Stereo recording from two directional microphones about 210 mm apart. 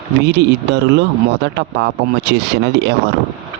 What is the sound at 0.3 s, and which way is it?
Speech, 55° right (ahead or behind).